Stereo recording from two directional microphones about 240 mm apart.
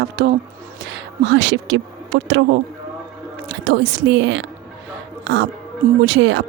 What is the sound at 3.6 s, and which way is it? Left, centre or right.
Speech, right.